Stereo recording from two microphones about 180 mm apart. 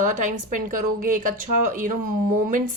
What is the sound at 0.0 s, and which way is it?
A woman's voice, 45° right (ahead or behind).